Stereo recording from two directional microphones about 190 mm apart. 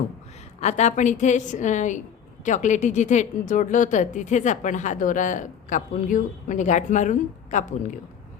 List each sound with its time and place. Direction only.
0.6 s a woman's voice: 35° left (ahead or behind)